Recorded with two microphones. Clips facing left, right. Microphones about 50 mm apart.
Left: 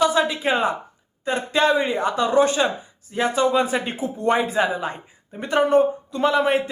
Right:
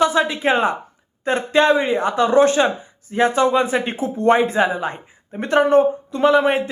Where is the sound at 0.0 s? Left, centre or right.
Right.